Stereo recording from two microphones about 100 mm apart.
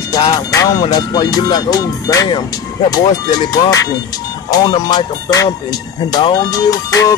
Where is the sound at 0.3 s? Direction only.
40° left (ahead or behind).